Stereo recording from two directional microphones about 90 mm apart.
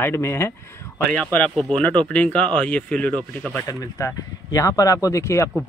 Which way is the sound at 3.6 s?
40° left (ahead or behind).